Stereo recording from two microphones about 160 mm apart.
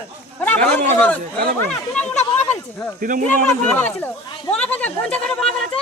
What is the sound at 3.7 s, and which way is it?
Speech, 15° left (ahead or behind).